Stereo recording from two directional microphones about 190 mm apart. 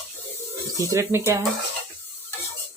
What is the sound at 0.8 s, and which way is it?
Speech, 15° right (ahead or behind).